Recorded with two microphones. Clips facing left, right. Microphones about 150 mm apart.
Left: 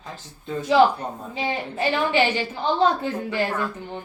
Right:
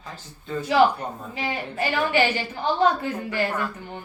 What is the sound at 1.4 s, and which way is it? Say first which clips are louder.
Speech: left 2 dB; 25° left (ahead or behind).